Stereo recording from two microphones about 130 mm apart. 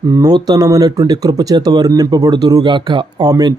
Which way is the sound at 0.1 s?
30° right (ahead or behind).